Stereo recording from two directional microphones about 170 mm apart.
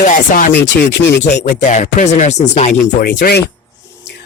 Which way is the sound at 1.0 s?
90° left.